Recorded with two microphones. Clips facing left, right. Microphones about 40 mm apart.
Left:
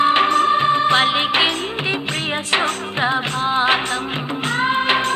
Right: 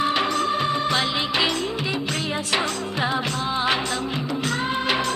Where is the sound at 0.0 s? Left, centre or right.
Left.